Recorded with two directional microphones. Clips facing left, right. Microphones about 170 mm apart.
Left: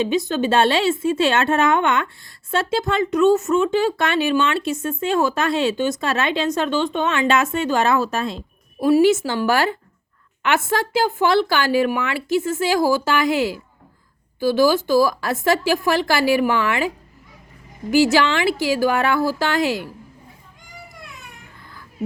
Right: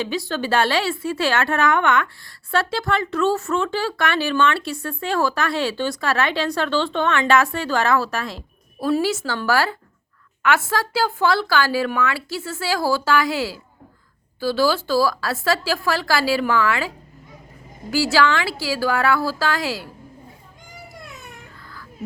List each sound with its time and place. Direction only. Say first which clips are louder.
0.0 s speech: left 5 dB; 20° left (ahead or behind)
17.9 s speech: left 3 dB; 20° left (ahead or behind)